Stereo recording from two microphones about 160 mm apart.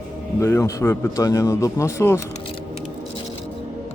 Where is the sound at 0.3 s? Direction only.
15° left (ahead or behind).